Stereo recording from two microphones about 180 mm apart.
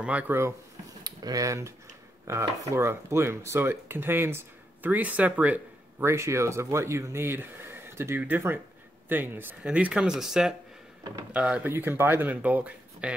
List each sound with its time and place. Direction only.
0.0 s speech: 10° right (ahead or behind)